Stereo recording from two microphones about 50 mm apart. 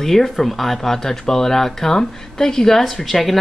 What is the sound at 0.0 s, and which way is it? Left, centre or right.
Speech, centre.